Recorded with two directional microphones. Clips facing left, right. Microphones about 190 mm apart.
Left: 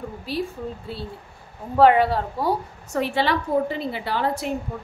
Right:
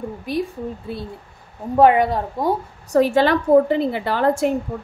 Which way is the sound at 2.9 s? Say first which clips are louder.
Right 7 dB; 45° right (ahead or behind).